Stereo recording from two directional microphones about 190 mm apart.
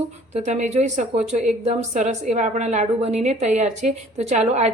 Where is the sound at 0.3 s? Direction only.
35° right (ahead or behind).